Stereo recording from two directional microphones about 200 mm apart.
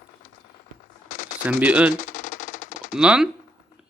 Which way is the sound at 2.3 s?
40° left (ahead or behind).